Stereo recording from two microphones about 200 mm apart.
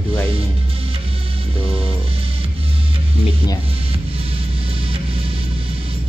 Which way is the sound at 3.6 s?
30° right (ahead or behind).